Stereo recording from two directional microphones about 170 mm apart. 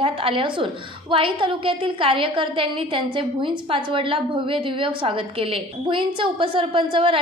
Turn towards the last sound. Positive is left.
turn(degrees=-30)  # may be behind; listen again after turning